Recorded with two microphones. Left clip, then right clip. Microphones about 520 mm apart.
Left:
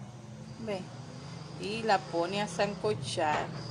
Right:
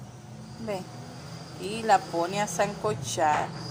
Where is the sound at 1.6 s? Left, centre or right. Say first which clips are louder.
Right 5 dB; left.